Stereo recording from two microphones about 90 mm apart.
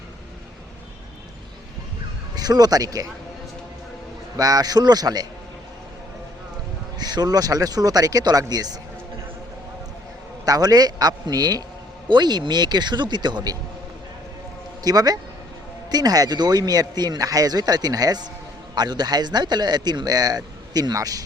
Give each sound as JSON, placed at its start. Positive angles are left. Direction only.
{"t": 2.3, "sound": "speech", "side_deg": -45}
{"t": 4.4, "sound": "a man's voice", "side_deg": -45}
{"t": 7.0, "sound": "a man's voice", "side_deg": -50}
{"t": 10.4, "sound": "a man's voice", "side_deg": -45}
{"t": 14.8, "sound": "a man's voice", "side_deg": -45}